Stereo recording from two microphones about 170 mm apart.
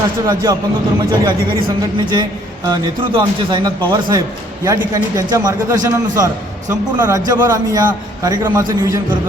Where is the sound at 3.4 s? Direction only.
25° right (ahead or behind).